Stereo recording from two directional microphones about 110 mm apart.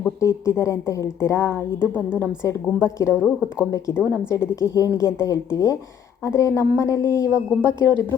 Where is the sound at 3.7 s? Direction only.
30° left (ahead or behind).